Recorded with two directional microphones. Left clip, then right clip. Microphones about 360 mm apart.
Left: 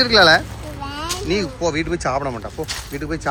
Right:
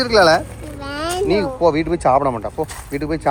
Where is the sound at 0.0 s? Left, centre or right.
Centre.